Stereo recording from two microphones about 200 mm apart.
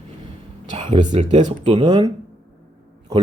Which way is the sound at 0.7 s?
30° right (ahead or behind).